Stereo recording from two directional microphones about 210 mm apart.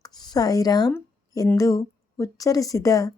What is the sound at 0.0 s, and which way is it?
Speech, 20° left (ahead or behind).